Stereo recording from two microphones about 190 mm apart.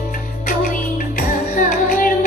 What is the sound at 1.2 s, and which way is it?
Music, 45° left (ahead or behind).